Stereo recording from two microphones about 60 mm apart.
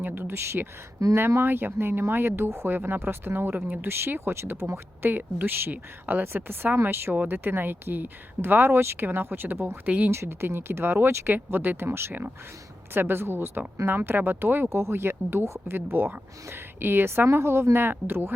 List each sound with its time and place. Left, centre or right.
0.0 s speech: right
1.0 s speech: right
1.4 s speech: right
3.8 s speech: right
5.0 s speech: right
9.8 s speech: right
10.1 s speech: right
11.3 s speech: right
14.7 s speech: right